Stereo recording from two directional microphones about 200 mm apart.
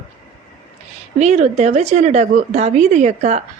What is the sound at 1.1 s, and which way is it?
A woman's voice, 35° right (ahead or behind).